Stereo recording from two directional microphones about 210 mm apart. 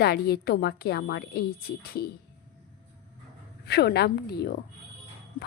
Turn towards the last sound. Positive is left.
turn(degrees=50)  # may be behind; listen again after turning